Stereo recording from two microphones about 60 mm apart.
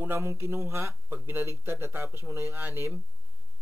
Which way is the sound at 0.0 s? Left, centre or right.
Right.